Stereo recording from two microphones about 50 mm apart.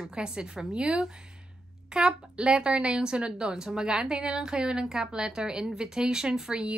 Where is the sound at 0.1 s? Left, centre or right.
Centre.